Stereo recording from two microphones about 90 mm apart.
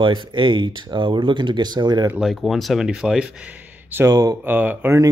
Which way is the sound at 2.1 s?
5° right (ahead or behind).